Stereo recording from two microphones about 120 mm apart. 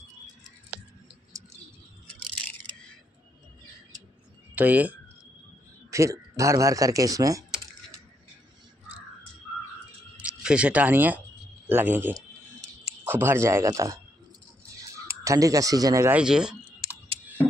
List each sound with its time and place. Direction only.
1.3 s bird: 25° right (ahead or behind)
4.6 s speech: 10° right (ahead or behind)
5.9 s speech: 25° right (ahead or behind)
10.1 s speech: 10° right (ahead or behind); by 13.9 s 25° right (ahead or behind)
15.0 s speech: 25° right (ahead or behind)
16.1 s speech: 5° right (ahead or behind)